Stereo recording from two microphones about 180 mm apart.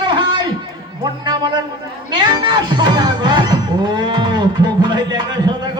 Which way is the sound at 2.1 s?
25° right (ahead or behind).